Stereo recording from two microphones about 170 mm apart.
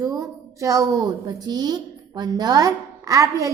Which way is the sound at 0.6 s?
20° right (ahead or behind).